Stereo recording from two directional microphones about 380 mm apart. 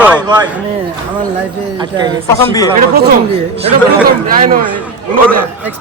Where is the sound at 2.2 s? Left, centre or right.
Centre.